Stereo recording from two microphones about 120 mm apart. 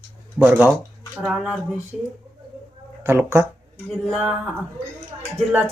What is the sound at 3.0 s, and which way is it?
Speech, 20° right (ahead or behind).